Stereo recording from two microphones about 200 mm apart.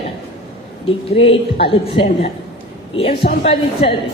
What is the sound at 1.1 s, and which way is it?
A woman's voice, 30° left (ahead or behind).